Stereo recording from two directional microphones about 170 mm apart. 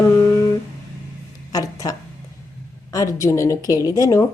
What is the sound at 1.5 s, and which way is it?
Speech, 20° left (ahead or behind).